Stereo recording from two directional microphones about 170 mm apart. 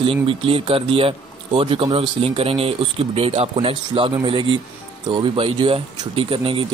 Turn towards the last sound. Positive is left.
turn(degrees=-30)  # may be behind; listen again after turning